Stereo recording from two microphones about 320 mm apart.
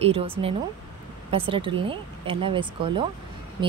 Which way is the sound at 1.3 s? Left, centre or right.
Centre.